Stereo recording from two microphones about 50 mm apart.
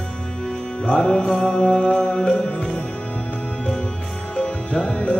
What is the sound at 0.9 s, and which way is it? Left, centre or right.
Music, centre.